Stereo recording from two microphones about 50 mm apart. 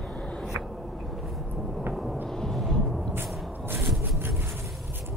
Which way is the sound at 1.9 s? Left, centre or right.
Centre.